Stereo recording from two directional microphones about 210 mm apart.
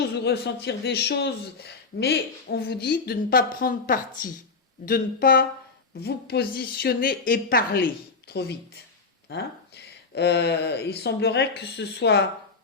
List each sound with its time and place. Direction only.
0.3 s speech: 55° left (ahead or behind)